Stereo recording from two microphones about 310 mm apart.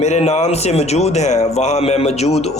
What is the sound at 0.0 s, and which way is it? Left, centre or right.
A man's voice, left.